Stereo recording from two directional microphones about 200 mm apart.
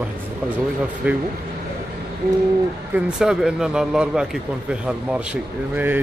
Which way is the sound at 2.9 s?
5° right (ahead or behind).